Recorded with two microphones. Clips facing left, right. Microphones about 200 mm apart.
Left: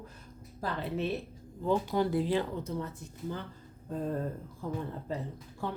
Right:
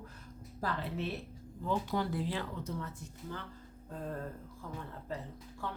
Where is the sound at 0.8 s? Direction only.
20° left (ahead or behind).